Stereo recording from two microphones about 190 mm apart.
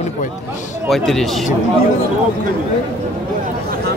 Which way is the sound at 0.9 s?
Centre (ahead or behind).